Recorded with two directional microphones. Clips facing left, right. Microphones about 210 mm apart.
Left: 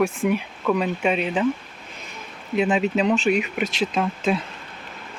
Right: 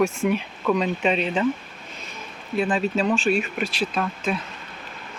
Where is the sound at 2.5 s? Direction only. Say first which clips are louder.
Left 2 dB; 15° left (ahead or behind).